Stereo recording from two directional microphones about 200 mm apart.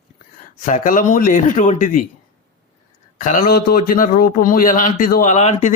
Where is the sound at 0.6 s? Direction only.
40° left (ahead or behind).